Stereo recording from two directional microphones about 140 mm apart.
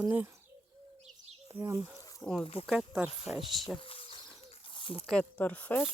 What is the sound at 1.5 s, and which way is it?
Speech, 20° right (ahead or behind).